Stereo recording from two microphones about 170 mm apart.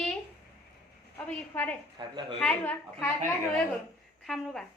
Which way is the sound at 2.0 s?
25° right (ahead or behind).